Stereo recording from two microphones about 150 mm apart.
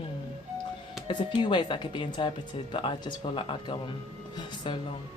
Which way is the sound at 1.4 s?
30° left (ahead or behind).